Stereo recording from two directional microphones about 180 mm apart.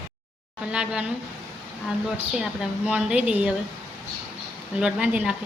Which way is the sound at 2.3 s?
5° right (ahead or behind).